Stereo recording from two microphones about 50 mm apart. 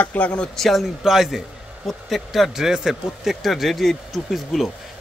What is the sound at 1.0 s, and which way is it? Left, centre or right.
A man's voice, centre.